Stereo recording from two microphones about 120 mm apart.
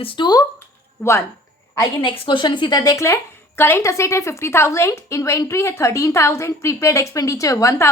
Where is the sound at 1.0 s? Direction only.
20° left (ahead or behind).